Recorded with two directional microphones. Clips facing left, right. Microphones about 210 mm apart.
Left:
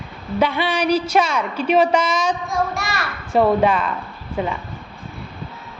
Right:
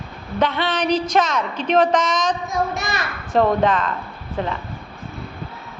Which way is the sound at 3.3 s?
10° left (ahead or behind).